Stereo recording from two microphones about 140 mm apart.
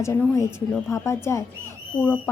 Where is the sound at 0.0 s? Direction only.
20° left (ahead or behind).